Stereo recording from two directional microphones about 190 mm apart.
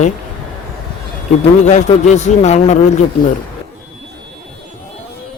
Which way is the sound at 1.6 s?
35° left (ahead or behind).